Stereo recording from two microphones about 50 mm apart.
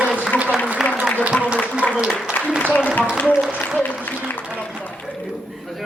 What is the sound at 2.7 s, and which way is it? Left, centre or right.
Speech, left.